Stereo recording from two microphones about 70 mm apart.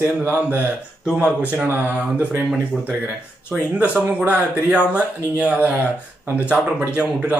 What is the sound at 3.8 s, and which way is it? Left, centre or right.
Speech, right.